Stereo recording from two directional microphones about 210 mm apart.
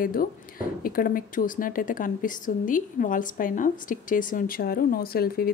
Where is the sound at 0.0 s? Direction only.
40° left (ahead or behind).